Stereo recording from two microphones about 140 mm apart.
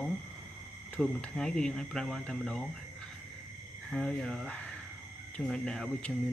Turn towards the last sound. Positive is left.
turn(degrees=5)  # may be behind; listen again after turning